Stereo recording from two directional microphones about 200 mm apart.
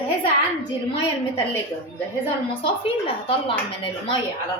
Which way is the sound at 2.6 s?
25° left (ahead or behind).